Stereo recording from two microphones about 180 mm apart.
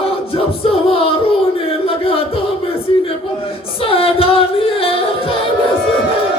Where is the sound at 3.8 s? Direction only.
30° left (ahead or behind).